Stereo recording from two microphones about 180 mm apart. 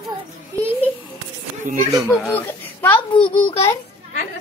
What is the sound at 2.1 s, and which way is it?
Speech, 10° left (ahead or behind).